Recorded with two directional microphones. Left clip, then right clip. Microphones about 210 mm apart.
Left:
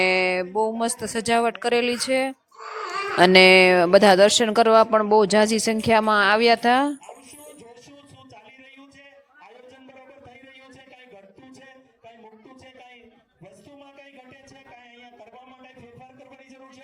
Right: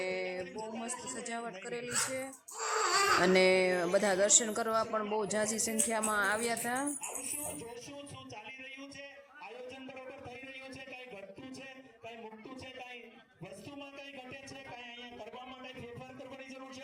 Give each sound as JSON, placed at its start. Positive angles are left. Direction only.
{"t": 0.0, "sound": "speech", "side_deg": 40}